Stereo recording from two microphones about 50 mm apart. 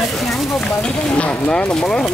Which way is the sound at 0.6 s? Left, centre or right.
Centre.